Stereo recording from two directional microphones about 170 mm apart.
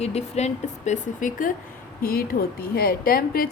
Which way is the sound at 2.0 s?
60° left (ahead or behind).